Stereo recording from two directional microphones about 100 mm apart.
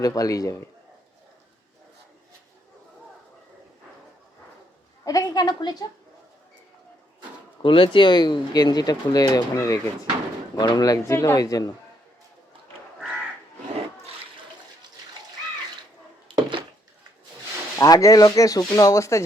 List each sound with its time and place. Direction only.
0.0 s speech: 35° left (ahead or behind)
5.0 s speech: 40° left (ahead or behind)
7.6 s speech: 60° left (ahead or behind); by 11.7 s 40° left (ahead or behind)
16.3 s a sound: 55° right (ahead or behind)
17.7 s speech: 35° left (ahead or behind)